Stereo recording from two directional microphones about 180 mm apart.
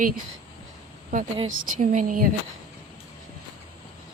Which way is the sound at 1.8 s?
45° right (ahead or behind).